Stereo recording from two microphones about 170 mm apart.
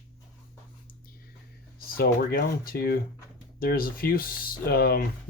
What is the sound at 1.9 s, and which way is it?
Speech, 60° left (ahead or behind).